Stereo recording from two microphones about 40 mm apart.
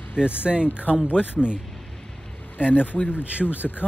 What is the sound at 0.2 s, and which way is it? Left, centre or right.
Speech, right.